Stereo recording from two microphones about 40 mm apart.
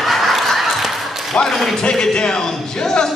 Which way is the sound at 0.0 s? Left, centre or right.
Centre.